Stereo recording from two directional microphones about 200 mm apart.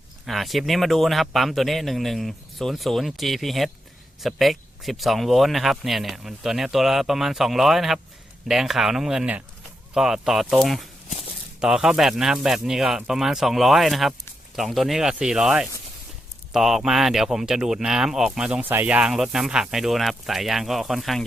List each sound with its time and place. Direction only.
0.3 s speech: centre (ahead or behind)